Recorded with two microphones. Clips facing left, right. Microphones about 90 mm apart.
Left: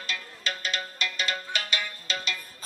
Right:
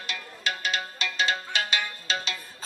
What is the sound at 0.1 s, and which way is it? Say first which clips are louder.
Music: right 2 dB; 40° left (ahead or behind).